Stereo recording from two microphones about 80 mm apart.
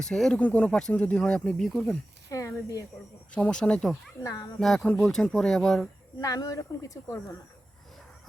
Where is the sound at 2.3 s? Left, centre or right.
Left.